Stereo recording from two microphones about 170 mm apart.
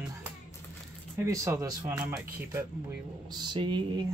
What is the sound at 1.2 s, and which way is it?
Speech, 20° right (ahead or behind).